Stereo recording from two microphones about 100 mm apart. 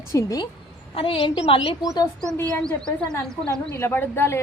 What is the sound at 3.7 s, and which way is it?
Speech, 20° left (ahead or behind).